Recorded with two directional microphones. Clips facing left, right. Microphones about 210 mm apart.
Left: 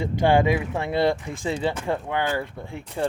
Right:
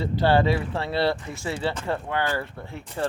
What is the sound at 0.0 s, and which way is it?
Speech, 15° left (ahead or behind).